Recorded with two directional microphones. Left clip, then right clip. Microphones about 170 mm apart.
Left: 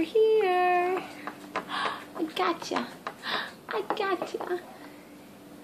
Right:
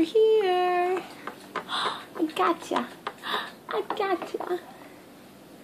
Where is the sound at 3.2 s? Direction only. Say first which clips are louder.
Right 1 dB; 20° right (ahead or behind).